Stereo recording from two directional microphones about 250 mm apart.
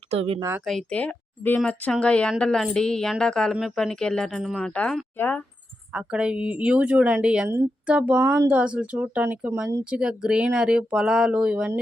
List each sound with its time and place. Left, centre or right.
0.1 s speech: right
0.4 s speech: centre
5.9 s speech: centre